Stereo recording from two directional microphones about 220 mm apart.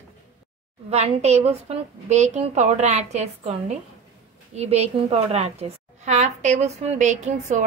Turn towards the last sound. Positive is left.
turn(degrees=-35)  # may be behind; listen again after turning